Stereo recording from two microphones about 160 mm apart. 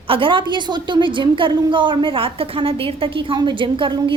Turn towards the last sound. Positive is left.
turn(degrees=-30)  # may be behind; listen again after turning